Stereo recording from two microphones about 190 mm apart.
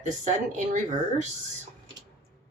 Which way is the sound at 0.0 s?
40° right (ahead or behind).